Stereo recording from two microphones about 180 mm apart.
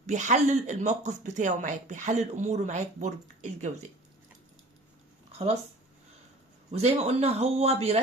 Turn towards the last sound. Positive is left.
turn(degrees=-35)  # may be behind; listen again after turning